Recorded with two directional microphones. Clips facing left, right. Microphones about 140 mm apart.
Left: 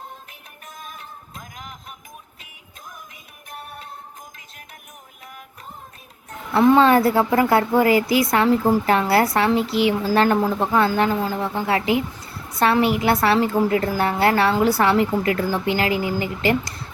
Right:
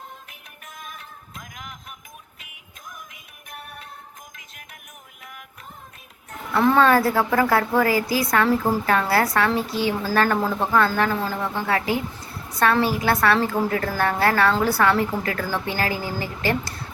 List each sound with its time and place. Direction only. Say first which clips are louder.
0.3 s music: left 2 dB; 30° left (ahead or behind)
3.5 s music: left 3 dB; 30° left (ahead or behind)
6.5 s a woman's voice: left 3 dB; 20° left (ahead or behind)
13.0 s a woman's voice: left 2 dB; 25° left (ahead or behind)